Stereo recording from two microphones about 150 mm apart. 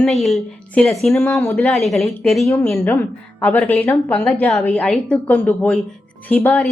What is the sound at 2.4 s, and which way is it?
A woman's voice, 20° left (ahead or behind).